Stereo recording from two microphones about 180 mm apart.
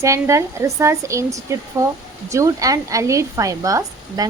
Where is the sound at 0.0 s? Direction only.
15° right (ahead or behind).